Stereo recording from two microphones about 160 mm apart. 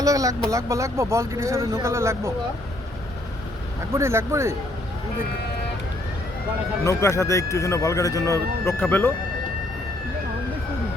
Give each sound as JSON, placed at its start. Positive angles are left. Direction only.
{"t": 0.0, "sound": "speech", "side_deg": -20}
{"t": 3.9, "sound": "speech", "side_deg": -15}
{"t": 6.8, "sound": "speech", "side_deg": 20}